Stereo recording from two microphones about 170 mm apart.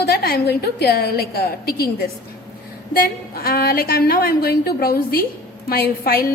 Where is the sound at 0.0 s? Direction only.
65° left (ahead or behind).